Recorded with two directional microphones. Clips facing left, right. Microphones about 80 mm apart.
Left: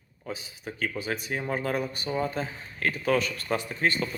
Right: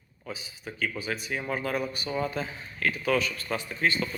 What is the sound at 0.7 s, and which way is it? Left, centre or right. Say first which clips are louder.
Speech: left 1 dB; left.